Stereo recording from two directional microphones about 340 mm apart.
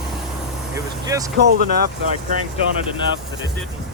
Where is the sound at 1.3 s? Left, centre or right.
Right.